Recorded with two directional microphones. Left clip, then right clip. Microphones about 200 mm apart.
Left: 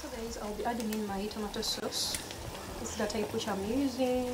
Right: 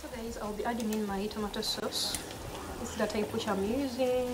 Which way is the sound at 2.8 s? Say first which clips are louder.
Right 1 dB; 15° left (ahead or behind).